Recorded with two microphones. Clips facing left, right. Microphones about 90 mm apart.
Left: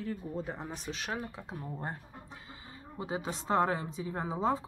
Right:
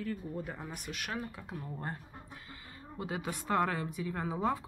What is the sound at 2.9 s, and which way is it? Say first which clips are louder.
Speech: left 2 dB; 20° left (ahead or behind).